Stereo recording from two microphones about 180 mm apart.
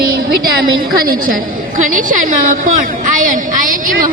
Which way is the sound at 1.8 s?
50° right (ahead or behind).